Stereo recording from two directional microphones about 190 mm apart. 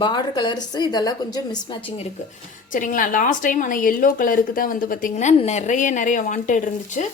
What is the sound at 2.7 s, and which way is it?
A woman's voice, 45° left (ahead or behind).